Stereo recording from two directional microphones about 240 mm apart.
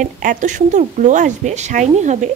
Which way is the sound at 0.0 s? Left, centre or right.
Right.